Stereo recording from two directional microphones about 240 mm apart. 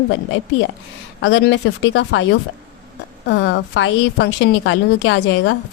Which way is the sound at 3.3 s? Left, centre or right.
Left.